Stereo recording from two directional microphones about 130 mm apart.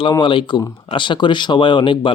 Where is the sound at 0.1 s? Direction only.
40° left (ahead or behind).